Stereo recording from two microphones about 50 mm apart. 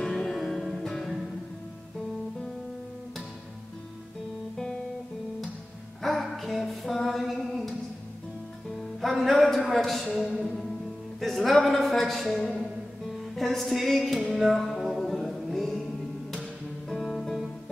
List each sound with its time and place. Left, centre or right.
0.0 s music: centre
6.0 s a sound: centre
9.0 s a man's voice: centre
10.4 s music: centre
11.1 s a man's voice: centre
14.3 s music: centre
16.9 s guitar: centre